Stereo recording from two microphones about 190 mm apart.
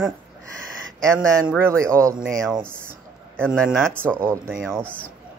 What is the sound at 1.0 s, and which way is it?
Speech, 15° right (ahead or behind).